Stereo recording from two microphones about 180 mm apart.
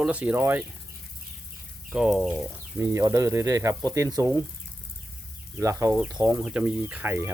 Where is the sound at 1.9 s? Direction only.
5° right (ahead or behind).